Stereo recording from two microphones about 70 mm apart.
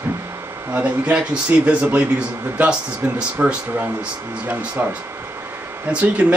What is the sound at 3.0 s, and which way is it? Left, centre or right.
Speech, right.